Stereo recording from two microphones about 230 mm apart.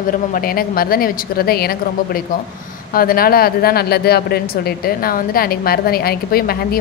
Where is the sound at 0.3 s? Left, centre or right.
Left.